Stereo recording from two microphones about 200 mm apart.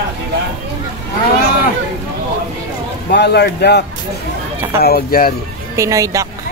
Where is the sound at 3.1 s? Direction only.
55° left (ahead or behind).